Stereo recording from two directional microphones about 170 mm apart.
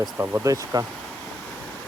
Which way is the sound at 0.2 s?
15° right (ahead or behind).